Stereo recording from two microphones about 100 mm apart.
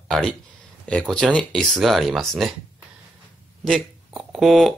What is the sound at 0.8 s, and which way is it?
Speech, 10° left (ahead or behind).